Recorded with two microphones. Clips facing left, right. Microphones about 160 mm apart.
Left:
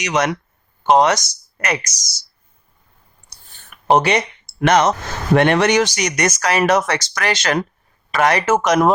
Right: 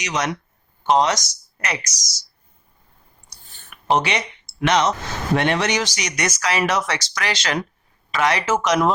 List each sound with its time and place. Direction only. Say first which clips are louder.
0.0 s speech: left 5 dB; 60° left (ahead or behind)
3.8 s speech: left 5 dB; 45° left (ahead or behind)